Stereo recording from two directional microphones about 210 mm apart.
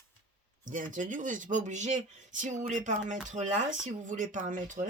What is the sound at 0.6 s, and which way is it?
Speech, 40° right (ahead or behind).